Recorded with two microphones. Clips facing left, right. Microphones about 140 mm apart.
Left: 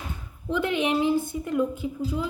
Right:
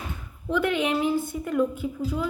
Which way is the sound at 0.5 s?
25° left (ahead or behind).